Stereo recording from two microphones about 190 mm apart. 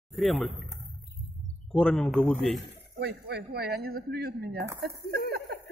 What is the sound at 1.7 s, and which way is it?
Speech, 5° left (ahead or behind).